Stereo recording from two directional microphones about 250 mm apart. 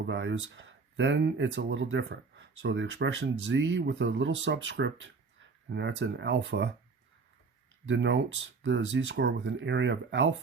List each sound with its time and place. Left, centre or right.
0.0 s speech: right
7.9 s speech: right